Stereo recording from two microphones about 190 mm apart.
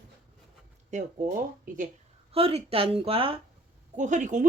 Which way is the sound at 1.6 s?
45° right (ahead or behind).